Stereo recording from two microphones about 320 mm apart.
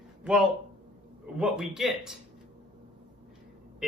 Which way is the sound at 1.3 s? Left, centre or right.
Centre.